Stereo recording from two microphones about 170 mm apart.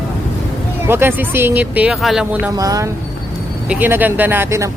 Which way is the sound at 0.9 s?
15° right (ahead or behind).